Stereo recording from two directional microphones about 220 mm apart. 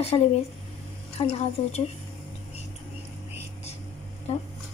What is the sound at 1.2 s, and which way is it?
Speech, 30° left (ahead or behind).